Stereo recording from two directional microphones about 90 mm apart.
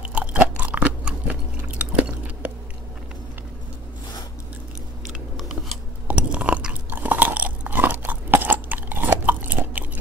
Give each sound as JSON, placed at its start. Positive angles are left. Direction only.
{"t": 0.0, "sound": "crunch", "side_deg": -15}
{"t": 1.8, "sound": "chewing", "side_deg": -15}
{"t": 5.4, "sound": "scissors", "side_deg": 0}
{"t": 6.0, "sound": "chewing", "side_deg": -15}